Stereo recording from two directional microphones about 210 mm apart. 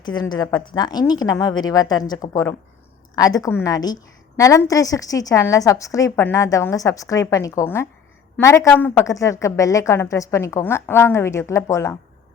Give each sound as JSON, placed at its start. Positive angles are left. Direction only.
{"t": 0.0, "sound": "a woman's voice", "side_deg": 20}